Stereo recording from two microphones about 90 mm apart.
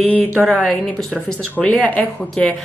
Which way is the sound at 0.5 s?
5° left (ahead or behind).